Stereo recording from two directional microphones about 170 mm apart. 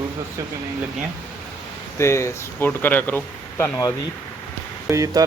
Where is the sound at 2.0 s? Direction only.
15° left (ahead or behind).